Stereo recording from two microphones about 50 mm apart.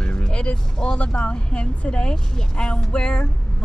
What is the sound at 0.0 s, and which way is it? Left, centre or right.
Speech, centre.